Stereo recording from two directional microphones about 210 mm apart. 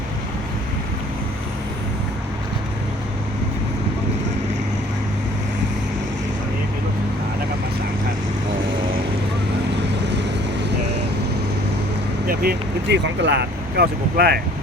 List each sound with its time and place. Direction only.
12.3 s speech: 45° right (ahead or behind)